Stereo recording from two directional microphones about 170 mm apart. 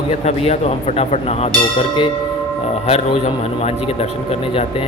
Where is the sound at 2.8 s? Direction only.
35° left (ahead or behind).